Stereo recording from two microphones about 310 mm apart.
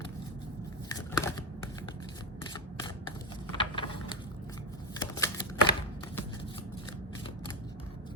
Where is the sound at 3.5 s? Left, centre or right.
Centre.